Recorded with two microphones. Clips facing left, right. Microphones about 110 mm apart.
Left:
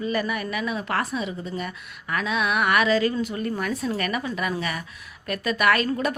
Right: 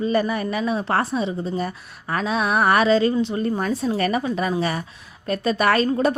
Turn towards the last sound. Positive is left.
turn(degrees=-30)  # may be behind; listen again after turning